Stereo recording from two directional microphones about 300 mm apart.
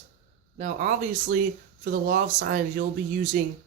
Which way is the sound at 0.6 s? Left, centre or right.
Right.